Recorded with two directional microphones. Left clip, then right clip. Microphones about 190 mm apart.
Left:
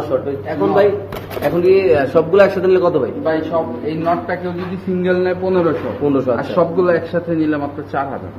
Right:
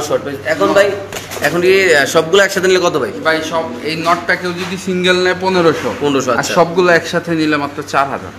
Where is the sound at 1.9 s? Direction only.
25° right (ahead or behind).